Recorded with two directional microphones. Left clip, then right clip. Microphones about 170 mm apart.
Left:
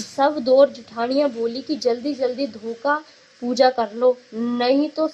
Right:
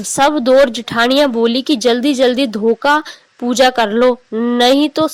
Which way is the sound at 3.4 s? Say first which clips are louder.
Right 6 dB; 45° right (ahead or behind).